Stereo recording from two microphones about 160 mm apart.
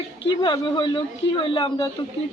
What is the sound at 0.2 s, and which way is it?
Speech, 30° left (ahead or behind).